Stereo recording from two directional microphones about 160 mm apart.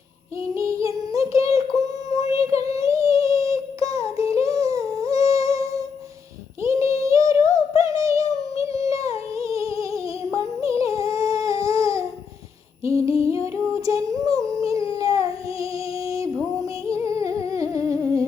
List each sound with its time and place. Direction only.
0.5 s child singing: 20° right (ahead or behind)
4.4 s humming: 20° right (ahead or behind)
6.6 s child singing: 20° right (ahead or behind)
7.0 s synthetic singing: 20° right (ahead or behind)
7.8 s a sound: 20° right (ahead or behind)
9.3 s humming: 20° right (ahead or behind)
11.6 s a sound: 20° right (ahead or behind)
12.8 s humming: 20° right (ahead or behind)
13.4 s a sound: 20° right (ahead or behind)
14.9 s female singing: 20° right (ahead or behind)